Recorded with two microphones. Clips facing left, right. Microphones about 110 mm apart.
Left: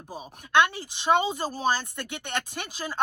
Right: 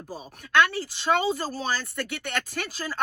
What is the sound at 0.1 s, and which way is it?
Speech, 15° left (ahead or behind).